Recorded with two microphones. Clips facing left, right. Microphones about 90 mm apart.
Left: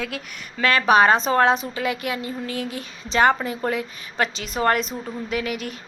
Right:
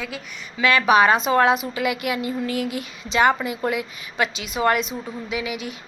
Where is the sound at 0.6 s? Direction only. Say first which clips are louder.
Even; 35° left (ahead or behind).